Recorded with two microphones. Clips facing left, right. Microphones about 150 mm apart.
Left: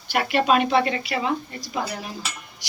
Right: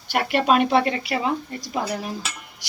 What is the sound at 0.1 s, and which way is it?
Speech, 50° right (ahead or behind).